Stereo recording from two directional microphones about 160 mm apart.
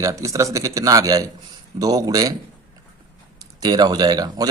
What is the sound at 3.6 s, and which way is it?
Speech, 25° right (ahead or behind).